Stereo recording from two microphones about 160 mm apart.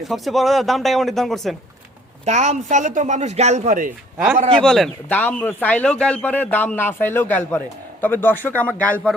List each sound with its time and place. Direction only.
0.0 s speech: centre (ahead or behind)
2.2 s speech: 45° right (ahead or behind)
4.6 s a man's voice: 5° left (ahead or behind)